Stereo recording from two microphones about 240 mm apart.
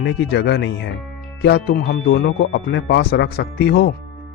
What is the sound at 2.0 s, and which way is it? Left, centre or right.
A woman's voice, left.